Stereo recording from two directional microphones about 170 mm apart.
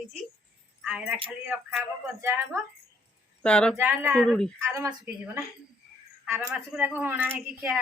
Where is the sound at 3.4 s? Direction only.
5° left (ahead or behind).